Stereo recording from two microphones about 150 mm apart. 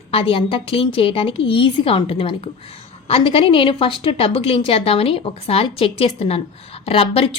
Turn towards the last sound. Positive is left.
turn(degrees=40)  # may be behind; listen again after turning